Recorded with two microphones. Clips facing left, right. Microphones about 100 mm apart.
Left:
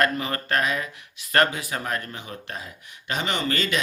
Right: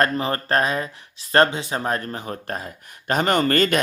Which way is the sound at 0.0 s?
35° right (ahead or behind).